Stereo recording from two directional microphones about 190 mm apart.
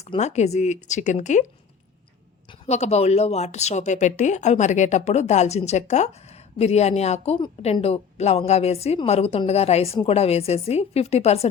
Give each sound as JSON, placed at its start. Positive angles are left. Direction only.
{"t": 0.0, "sound": "a woman's voice", "side_deg": 35}
{"t": 2.6, "sound": "a woman's voice", "side_deg": 35}